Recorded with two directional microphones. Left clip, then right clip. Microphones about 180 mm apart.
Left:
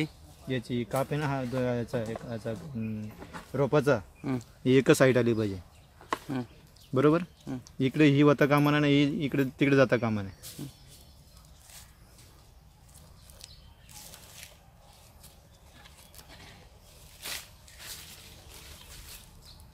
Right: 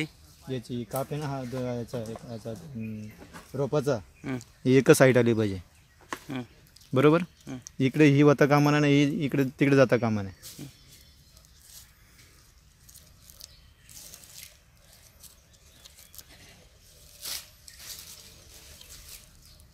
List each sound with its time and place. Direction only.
0.5 s speech: 25° right (ahead or behind)
3.5 s speech: 25° right (ahead or behind)
4.4 s speech: 50° right (ahead or behind)
6.9 s speech: 50° right (ahead or behind)